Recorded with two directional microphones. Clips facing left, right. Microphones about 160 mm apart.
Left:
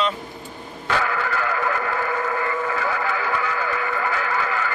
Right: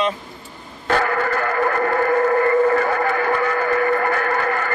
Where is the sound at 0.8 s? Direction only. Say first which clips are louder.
Right 5 dB; 45° right (ahead or behind).